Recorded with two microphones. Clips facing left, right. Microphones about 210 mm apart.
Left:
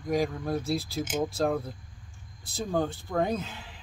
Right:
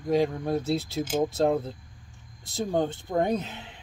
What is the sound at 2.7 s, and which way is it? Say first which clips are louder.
Speech: right 2 dB; 20° right (ahead or behind).